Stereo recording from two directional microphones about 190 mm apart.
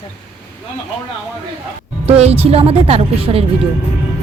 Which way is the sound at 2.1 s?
35° right (ahead or behind).